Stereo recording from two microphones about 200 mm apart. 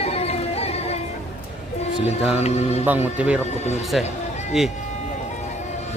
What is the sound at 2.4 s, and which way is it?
Speech, 35° left (ahead or behind).